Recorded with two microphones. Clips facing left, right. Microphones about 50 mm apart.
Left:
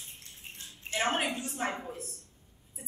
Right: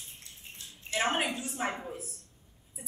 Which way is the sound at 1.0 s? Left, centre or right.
Centre.